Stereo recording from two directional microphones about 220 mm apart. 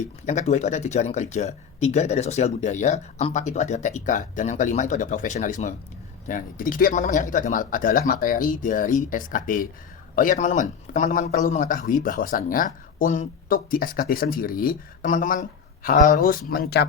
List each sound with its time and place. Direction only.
0.3 s a man's voice: 30° left (ahead or behind)